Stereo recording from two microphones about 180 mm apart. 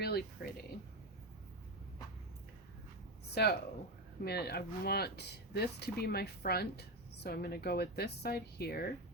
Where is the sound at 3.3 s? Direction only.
60° left (ahead or behind).